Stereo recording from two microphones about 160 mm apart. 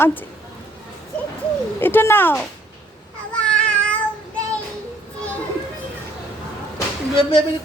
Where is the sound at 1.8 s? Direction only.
15° left (ahead or behind).